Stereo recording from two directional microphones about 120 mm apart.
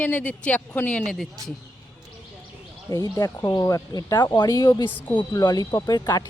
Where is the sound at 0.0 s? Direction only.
10° left (ahead or behind).